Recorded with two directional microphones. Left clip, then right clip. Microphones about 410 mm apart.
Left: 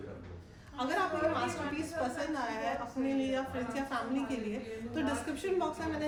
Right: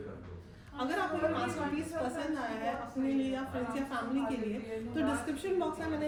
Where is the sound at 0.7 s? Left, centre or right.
Centre.